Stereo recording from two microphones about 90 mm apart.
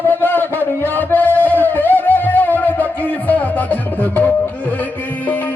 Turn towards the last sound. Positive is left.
turn(degrees=20)  # may be behind; listen again after turning